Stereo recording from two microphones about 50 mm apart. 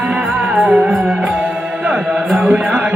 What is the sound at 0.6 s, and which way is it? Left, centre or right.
Music, centre.